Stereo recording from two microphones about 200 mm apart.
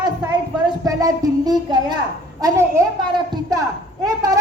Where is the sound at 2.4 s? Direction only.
15° right (ahead or behind).